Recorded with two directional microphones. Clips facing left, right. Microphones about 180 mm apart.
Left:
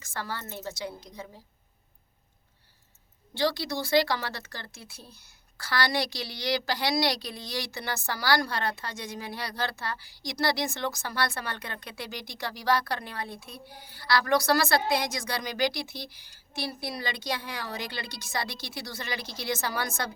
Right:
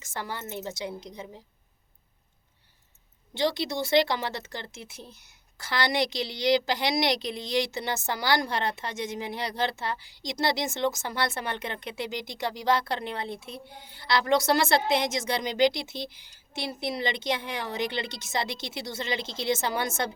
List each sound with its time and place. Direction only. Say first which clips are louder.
0.0 s speech: right 1 dB; 20° right (ahead or behind)
3.3 s speech: right 1 dB; 20° right (ahead or behind)